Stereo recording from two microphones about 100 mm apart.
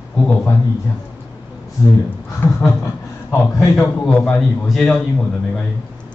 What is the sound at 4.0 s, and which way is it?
A man's voice, 5° left (ahead or behind).